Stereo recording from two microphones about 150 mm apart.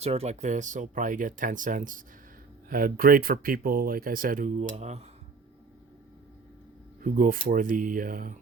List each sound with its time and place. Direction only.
0.0 s speech: 45° right (ahead or behind)
7.0 s speech: 65° right (ahead or behind)